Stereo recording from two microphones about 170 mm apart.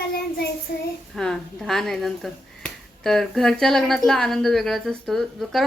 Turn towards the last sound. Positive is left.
turn(degrees=0)  # may be behind; listen again after turning